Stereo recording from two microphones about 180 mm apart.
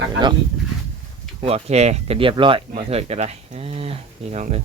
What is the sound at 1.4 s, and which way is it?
Speech, 35° right (ahead or behind).